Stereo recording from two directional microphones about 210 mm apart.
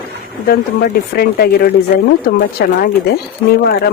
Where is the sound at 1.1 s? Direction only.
50° left (ahead or behind).